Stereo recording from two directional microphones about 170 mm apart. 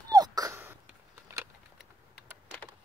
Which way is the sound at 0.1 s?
20° right (ahead or behind).